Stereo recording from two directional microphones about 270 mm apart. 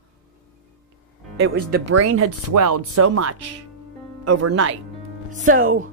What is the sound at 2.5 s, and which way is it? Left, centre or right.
Speech, right.